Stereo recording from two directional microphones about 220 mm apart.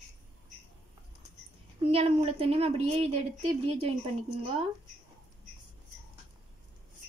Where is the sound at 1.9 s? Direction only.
25° right (ahead or behind).